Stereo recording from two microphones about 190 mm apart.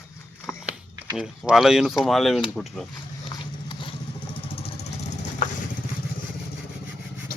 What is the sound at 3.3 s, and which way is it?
Horse, 25° left (ahead or behind).